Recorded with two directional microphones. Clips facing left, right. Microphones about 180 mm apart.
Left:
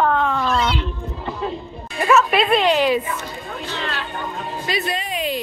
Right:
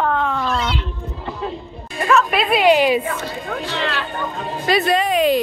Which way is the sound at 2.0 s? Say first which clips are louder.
Left 1 dB; centre (ahead or behind).